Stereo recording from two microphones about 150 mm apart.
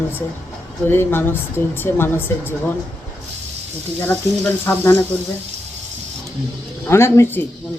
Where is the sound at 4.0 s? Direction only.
10° left (ahead or behind).